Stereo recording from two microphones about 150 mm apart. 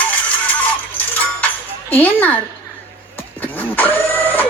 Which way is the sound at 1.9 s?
10° left (ahead or behind).